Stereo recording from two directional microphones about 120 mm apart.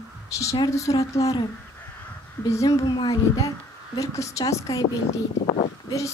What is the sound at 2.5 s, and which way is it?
Speech, 25° left (ahead or behind).